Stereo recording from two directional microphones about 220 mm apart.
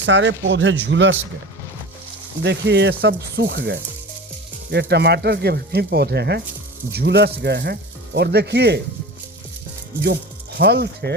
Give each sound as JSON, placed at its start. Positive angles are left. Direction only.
{"t": 0.0, "sound": "speech", "side_deg": -55}
{"t": 2.4, "sound": "speech", "side_deg": -50}
{"t": 10.6, "sound": "speech", "side_deg": -50}